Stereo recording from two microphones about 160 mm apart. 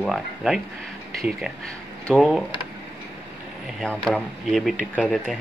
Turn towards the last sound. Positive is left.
turn(degrees=0)  # may be behind; listen again after turning